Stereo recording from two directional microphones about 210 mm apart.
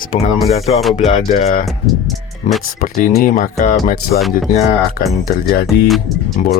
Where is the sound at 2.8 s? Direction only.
40° left (ahead or behind).